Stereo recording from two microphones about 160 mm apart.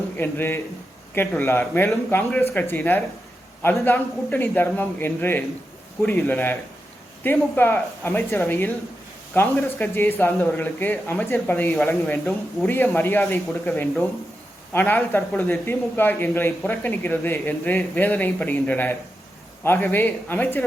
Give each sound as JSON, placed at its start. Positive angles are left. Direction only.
{"t": 0.2, "sound": "speech", "side_deg": 15}
{"t": 14.7, "sound": "speech", "side_deg": 10}